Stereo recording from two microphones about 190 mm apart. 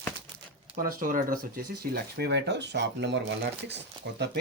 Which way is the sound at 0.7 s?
45° right (ahead or behind).